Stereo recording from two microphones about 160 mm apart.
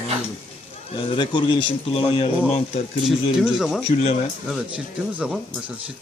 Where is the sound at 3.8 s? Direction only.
40° left (ahead or behind).